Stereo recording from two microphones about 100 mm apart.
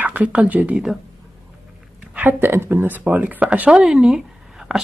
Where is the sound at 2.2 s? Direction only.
20° right (ahead or behind).